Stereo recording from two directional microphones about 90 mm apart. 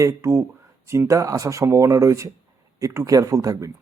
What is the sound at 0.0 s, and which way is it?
A man's voice, 35° right (ahead or behind).